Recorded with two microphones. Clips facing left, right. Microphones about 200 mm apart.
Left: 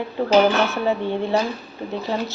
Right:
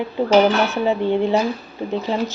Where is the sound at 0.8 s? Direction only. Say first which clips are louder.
Right 4 dB; 15° right (ahead or behind).